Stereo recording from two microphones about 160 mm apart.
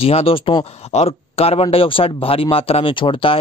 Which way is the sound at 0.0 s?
35° left (ahead or behind).